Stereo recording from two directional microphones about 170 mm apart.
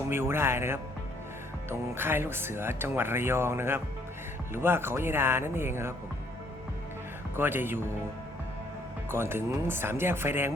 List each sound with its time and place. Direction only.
0.1 s speech: 15° right (ahead or behind)
7.3 s speech: 10° right (ahead or behind)
9.0 s speech: 15° right (ahead or behind)